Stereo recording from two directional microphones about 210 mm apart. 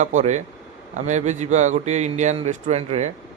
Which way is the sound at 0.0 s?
35° right (ahead or behind).